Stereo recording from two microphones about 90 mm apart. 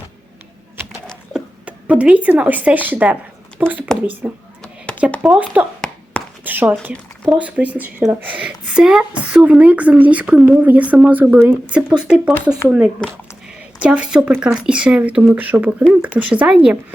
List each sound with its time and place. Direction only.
1.3 s a woman's voice: 15° right (ahead or behind)